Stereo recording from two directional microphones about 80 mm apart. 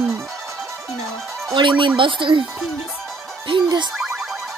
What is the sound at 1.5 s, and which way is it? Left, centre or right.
Speech, right.